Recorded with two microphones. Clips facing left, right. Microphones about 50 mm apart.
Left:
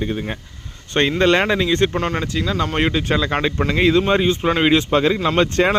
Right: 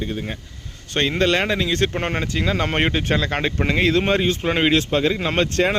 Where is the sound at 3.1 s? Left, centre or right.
Centre.